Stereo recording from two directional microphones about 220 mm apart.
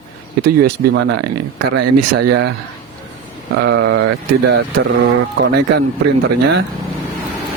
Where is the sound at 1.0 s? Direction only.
50° right (ahead or behind).